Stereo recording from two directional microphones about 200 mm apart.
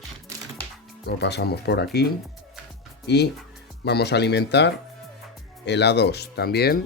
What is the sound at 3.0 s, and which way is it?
Speech, 55° left (ahead or behind).